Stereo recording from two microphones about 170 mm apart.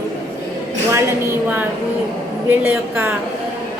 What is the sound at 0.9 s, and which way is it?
A woman's voice, 15° right (ahead or behind).